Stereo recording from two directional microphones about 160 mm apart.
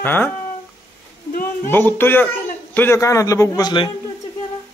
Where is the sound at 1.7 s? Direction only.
15° left (ahead or behind).